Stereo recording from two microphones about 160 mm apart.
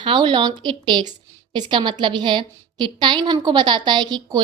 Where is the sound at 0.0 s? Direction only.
30° right (ahead or behind).